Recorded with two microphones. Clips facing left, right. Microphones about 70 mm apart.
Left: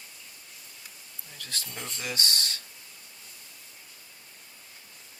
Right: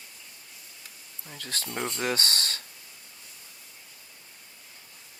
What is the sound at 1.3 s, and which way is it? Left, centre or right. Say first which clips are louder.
Speech: right 5 dB; right.